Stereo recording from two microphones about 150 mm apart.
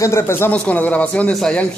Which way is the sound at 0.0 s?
15° left (ahead or behind).